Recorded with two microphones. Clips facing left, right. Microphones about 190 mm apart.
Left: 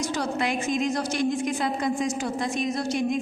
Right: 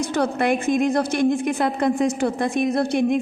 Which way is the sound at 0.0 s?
55° right (ahead or behind).